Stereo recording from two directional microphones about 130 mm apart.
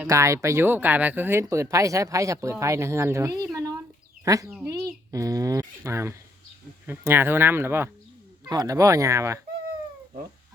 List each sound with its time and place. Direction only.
0.1 s speech: 25° right (ahead or behind)
8.4 s speech: 30° right (ahead or behind)